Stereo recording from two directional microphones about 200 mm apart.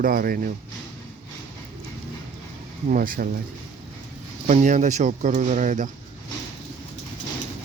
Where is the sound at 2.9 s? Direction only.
45° right (ahead or behind).